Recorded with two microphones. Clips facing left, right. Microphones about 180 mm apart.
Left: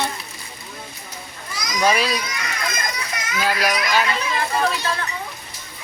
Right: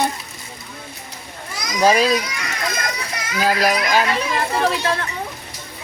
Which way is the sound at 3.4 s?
40° right (ahead or behind).